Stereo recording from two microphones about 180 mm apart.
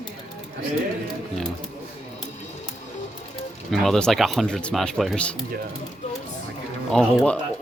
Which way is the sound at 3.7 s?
5° left (ahead or behind).